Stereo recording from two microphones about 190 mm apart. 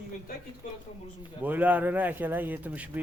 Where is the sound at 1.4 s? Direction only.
10° right (ahead or behind).